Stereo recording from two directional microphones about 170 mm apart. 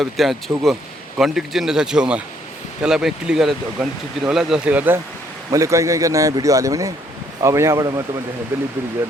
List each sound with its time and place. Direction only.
0.0 s a man's voice: centre (ahead or behind)